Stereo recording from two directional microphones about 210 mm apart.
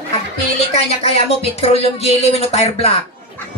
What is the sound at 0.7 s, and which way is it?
Speech, 30° left (ahead or behind).